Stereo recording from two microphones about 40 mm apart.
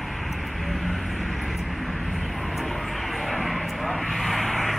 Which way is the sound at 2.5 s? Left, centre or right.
Centre.